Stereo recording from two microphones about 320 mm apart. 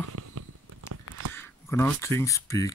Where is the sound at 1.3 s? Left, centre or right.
Centre.